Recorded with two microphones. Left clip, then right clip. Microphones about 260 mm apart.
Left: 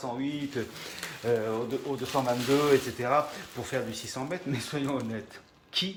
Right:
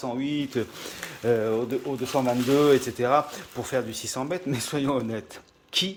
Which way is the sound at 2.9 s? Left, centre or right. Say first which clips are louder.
Right 4 dB; right.